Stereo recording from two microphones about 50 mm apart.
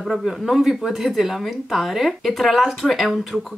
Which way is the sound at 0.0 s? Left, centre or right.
Centre.